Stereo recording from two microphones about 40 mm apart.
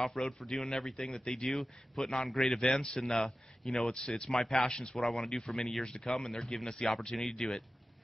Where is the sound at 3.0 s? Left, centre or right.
Centre.